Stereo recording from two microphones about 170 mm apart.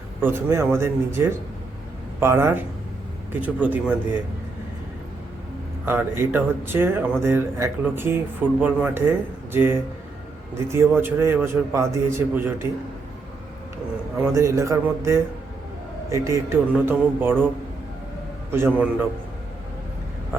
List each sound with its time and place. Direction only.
0.2 s speech: 10° right (ahead or behind)
5.8 s speech: 15° right (ahead or behind)
14.3 s speech: 15° right (ahead or behind)
18.5 s speech: 10° right (ahead or behind)